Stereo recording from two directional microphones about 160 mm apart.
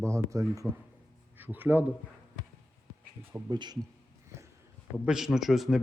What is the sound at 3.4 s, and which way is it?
Speech, 25° right (ahead or behind).